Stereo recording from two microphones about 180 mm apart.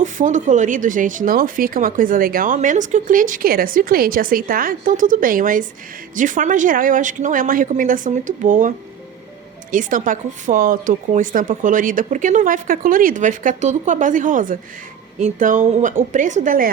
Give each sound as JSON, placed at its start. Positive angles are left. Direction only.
{"t": 0.0, "sound": "speech", "side_deg": -45}
{"t": 9.7, "sound": "speech", "side_deg": -45}